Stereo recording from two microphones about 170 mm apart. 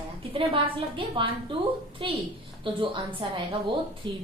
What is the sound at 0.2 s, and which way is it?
A woman's voice, 30° right (ahead or behind).